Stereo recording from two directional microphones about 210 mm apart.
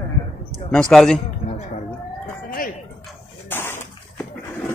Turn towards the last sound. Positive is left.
turn(degrees=10)  # may be behind; listen again after turning